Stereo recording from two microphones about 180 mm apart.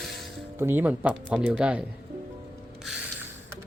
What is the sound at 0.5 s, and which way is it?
Speech, 10° right (ahead or behind).